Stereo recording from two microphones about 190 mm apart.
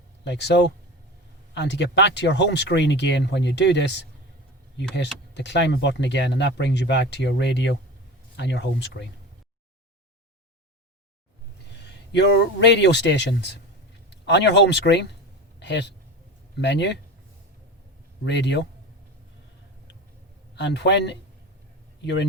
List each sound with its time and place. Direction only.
0.3 s speech: 65° left (ahead or behind)
5.3 s speech: 65° left (ahead or behind)
11.9 s speech: 65° left (ahead or behind)
18.3 s speech: 65° left (ahead or behind)
20.6 s a man's voice: 65° left (ahead or behind)